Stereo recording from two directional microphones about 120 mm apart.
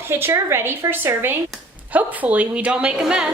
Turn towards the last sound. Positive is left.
turn(degrees=-5)  # may be behind; listen again after turning